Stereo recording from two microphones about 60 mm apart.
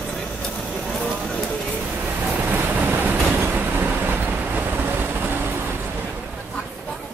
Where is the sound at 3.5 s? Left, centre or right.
Right.